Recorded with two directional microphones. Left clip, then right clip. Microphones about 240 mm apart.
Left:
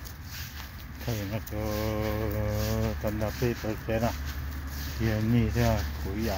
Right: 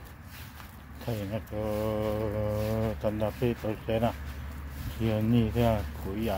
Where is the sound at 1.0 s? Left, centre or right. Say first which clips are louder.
Even; centre.